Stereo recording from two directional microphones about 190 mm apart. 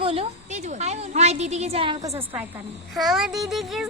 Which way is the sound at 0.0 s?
30° right (ahead or behind).